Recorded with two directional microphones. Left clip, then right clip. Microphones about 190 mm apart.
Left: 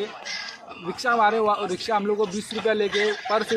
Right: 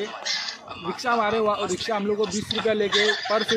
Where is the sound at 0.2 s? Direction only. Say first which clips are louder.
Right 4 dB; 45° right (ahead or behind).